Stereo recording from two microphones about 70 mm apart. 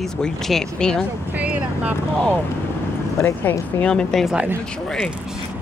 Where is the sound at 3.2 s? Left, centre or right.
Left.